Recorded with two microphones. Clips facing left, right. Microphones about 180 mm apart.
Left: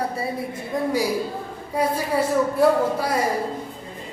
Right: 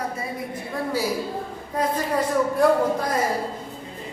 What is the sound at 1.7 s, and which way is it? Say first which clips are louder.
Speech: left 2 dB; 10° left (ahead or behind).